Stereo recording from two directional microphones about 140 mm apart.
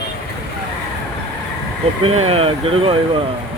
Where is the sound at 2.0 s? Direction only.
45° right (ahead or behind).